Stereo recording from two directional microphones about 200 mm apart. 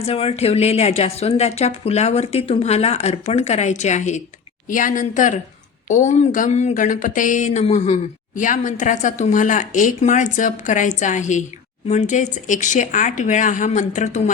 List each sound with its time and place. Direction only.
0.0 s a woman's voice: 30° left (ahead or behind)